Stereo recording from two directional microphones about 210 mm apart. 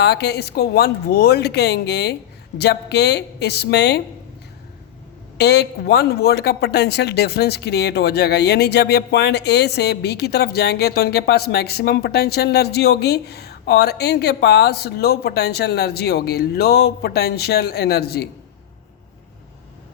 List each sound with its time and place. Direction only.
0.0 s speech: 50° left (ahead or behind)
5.4 s speech: 50° left (ahead or behind)